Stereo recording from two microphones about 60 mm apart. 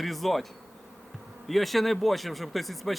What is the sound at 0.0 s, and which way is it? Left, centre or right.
Speech, centre.